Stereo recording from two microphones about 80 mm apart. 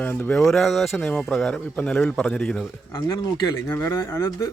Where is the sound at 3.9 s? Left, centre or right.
Left.